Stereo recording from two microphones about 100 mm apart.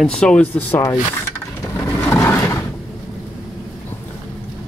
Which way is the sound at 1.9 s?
25° left (ahead or behind).